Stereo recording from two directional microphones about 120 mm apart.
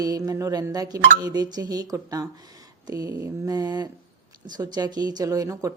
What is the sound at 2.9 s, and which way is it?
Mantra, 25° right (ahead or behind).